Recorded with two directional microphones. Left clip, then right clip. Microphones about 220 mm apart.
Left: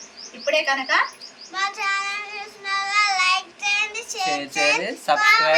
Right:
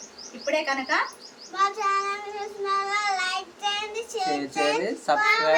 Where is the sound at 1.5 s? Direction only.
25° right (ahead or behind).